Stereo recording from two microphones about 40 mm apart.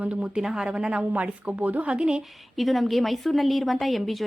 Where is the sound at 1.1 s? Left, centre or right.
Right.